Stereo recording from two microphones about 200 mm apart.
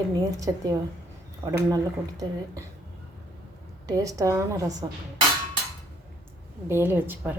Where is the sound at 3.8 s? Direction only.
15° right (ahead or behind).